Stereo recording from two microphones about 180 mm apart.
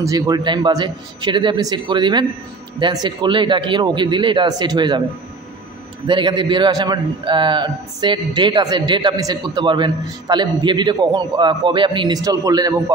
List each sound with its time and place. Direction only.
0.0 s a man's voice: 20° right (ahead or behind)
6.0 s a man's voice: 25° right (ahead or behind)